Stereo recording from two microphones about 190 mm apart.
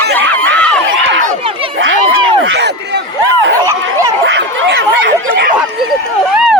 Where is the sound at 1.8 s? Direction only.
90° right.